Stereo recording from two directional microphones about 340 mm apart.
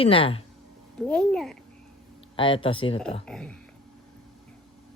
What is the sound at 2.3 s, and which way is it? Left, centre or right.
Speech, centre.